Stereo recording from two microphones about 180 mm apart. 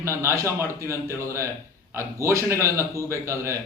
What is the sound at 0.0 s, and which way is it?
A man's voice, 15° right (ahead or behind).